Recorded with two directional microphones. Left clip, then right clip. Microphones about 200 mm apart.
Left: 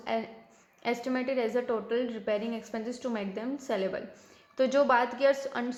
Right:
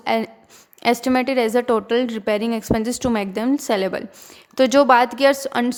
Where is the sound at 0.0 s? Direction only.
35° right (ahead or behind).